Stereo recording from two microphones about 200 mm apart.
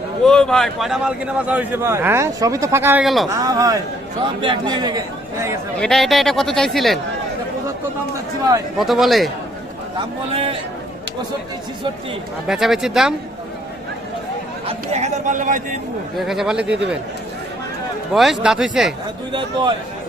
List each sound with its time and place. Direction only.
0.3 s a man's voice: 5° left (ahead or behind)
3.2 s a man's voice: 15° right (ahead or behind)
5.8 s a man's voice: centre (ahead or behind)
8.8 s a man's voice: centre (ahead or behind)
10.3 s speech: 30° right (ahead or behind)
12.5 s a man's voice: centre (ahead or behind)
14.7 s speech: 35° right (ahead or behind)
16.1 s a man's voice: centre (ahead or behind)
18.1 s a man's voice: centre (ahead or behind)